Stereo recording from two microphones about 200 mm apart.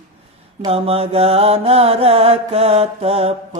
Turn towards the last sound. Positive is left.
turn(degrees=-30)  # may be behind; listen again after turning